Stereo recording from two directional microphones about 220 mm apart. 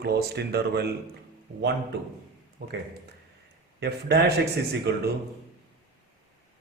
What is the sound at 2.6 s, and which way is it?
Speech, 50° right (ahead or behind).